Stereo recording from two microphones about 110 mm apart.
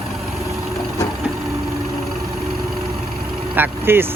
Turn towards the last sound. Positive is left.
turn(degrees=-20)  # may be behind; listen again after turning